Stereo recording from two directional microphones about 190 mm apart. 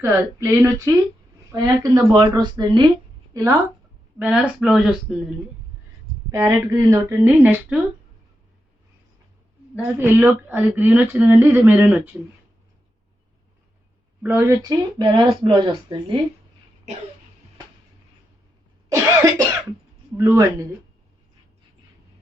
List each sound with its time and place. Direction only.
0.0 s speech: 15° right (ahead or behind)
4.2 s speech: 5° right (ahead or behind)
6.3 s speech: 15° right (ahead or behind)
9.7 s speech: 5° right (ahead or behind)
14.2 s speech: 10° right (ahead or behind)
18.9 s cough: 15° right (ahead or behind)
20.1 s speech: 15° right (ahead or behind)